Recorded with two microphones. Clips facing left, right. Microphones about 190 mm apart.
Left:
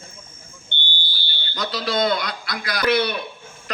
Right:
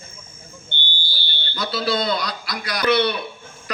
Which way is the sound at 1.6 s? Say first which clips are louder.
Even; 40° left (ahead or behind).